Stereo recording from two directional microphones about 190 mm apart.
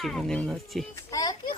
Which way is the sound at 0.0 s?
Centre (ahead or behind).